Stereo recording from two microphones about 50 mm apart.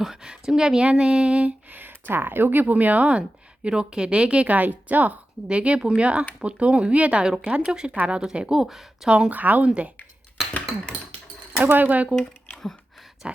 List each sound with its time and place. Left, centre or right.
0.0 s a woman's voice: centre
1.7 s a woman's voice: right; by 9.0 s centre
9.0 s speech: right
9.3 s speech: right
11.6 s speech: right
13.2 s a sound: centre